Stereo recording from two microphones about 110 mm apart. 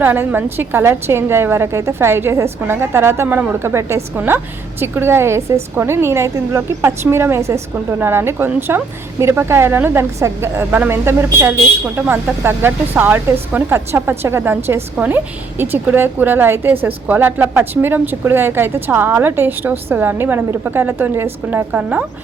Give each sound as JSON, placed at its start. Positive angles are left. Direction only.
{"t": 0.0, "sound": "a woman's voice", "side_deg": -15}